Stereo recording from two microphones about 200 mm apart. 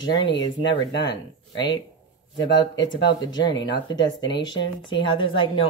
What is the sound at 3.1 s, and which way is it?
Speech, 20° left (ahead or behind).